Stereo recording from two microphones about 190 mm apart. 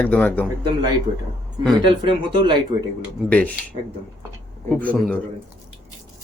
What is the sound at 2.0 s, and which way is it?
Speech, 25° right (ahead or behind).